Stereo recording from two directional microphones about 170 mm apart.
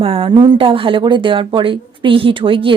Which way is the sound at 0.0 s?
35° right (ahead or behind).